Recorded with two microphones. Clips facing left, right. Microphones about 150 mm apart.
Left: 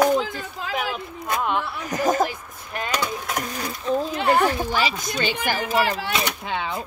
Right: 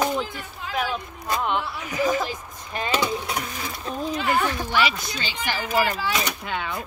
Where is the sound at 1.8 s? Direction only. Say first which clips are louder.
Left 4 dB; 45° left (ahead or behind).